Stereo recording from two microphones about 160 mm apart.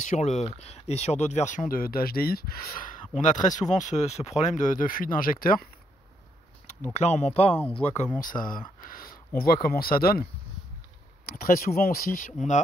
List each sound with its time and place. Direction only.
0.0 s speech: 50° left (ahead or behind); by 2.9 s 70° left (ahead or behind)
3.2 s speech: 50° left (ahead or behind)
6.9 s speech: 45° left (ahead or behind)
8.2 s speech: 60° left (ahead or behind)
11.2 s speech: 65° left (ahead or behind); by 12.6 s 50° left (ahead or behind)